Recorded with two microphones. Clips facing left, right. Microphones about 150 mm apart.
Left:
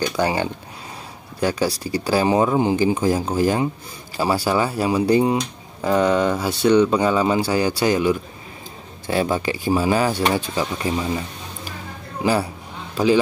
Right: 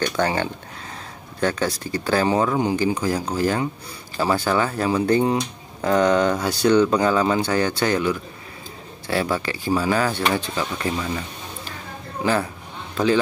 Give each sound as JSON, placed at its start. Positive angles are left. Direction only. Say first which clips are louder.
{"t": 0.0, "sound": "speech", "louder": "left 1 dB", "side_deg": 10}
{"t": 12.9, "sound": "speech", "louder": "left 2 dB", "side_deg": 10}